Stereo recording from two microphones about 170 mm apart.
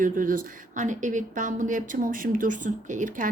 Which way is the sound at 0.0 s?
55° right (ahead or behind).